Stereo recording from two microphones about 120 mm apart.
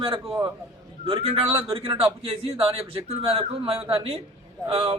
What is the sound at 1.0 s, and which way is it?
A man's voice, 55° right (ahead or behind).